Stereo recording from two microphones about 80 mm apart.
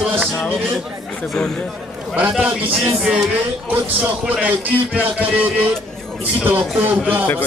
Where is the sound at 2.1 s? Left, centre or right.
Centre.